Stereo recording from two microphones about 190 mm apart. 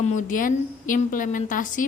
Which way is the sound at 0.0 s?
40° left (ahead or behind).